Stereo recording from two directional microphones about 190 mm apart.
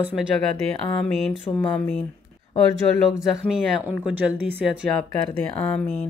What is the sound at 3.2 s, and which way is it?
Speech, 5° right (ahead or behind).